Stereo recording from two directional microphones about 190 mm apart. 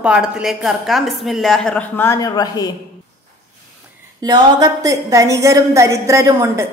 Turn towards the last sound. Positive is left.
turn(degrees=-15)  # may be behind; listen again after turning